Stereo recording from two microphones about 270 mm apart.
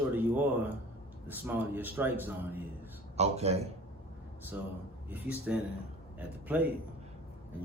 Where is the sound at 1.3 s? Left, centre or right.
Centre.